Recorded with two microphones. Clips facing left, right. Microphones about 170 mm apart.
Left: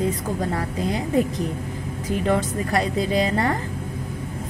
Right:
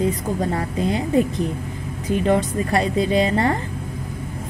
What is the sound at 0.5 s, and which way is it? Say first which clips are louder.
Speech: right 3 dB; 25° right (ahead or behind).